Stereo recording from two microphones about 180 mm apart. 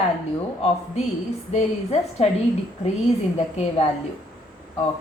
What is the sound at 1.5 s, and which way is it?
Speech, 40° left (ahead or behind).